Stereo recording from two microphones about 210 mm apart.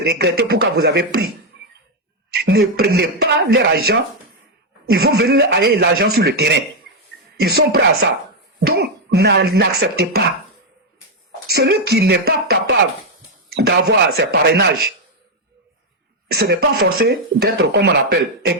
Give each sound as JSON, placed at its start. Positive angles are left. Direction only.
{"t": 0.0, "sound": "speech", "side_deg": -50}
{"t": 2.3, "sound": "speech", "side_deg": -50}
{"t": 11.5, "sound": "speech", "side_deg": -50}
{"t": 16.3, "sound": "speech", "side_deg": -50}